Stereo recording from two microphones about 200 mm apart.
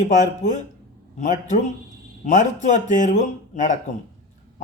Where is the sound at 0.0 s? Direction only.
35° left (ahead or behind).